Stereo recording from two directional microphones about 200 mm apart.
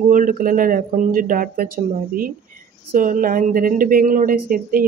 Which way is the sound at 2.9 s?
40° right (ahead or behind).